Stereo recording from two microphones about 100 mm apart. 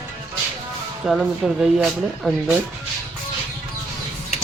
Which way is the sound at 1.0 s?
5° right (ahead or behind).